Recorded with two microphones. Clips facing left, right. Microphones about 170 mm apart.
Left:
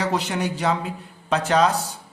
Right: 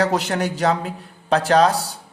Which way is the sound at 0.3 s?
45° right (ahead or behind).